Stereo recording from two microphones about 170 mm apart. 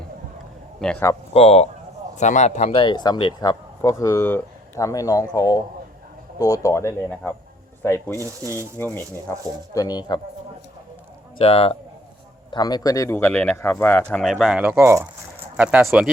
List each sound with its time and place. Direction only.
0.8 s speech: 5° left (ahead or behind)
1.3 s a man's voice: 35° left (ahead or behind)
2.7 s speech: 25° left (ahead or behind)
9.3 s speech: 10° left (ahead or behind)
9.7 s speech: 25° left (ahead or behind)
11.3 s speech: 35° left (ahead or behind)
12.5 s speech: 25° left (ahead or behind); by 16.0 s 5° right (ahead or behind)